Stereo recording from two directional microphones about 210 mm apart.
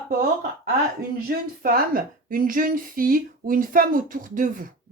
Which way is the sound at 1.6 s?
45° right (ahead or behind).